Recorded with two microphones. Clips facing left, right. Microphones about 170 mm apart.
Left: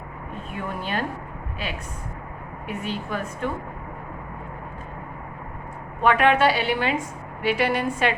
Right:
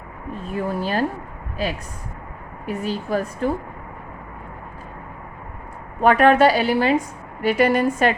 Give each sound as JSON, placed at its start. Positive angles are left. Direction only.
{"t": 0.5, "sound": "a woman's voice", "side_deg": -35}
{"t": 6.0, "sound": "a woman's voice", "side_deg": -40}